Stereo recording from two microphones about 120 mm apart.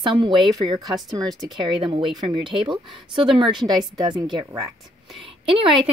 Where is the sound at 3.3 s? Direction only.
5° right (ahead or behind).